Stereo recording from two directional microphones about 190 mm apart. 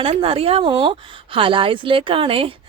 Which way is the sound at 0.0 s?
30° right (ahead or behind).